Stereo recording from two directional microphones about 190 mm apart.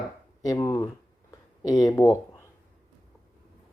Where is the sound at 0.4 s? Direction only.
15° left (ahead or behind).